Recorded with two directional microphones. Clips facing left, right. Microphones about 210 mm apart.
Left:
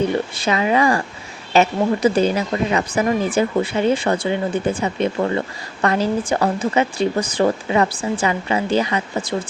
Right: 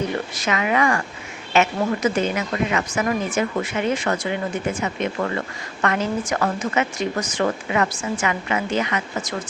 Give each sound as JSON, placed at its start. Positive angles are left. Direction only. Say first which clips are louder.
{"t": 0.3, "sound": "speech", "louder": "left 2 dB", "side_deg": 30}